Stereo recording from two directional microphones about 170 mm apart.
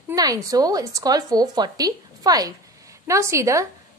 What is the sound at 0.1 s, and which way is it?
A woman's voice, 20° right (ahead or behind).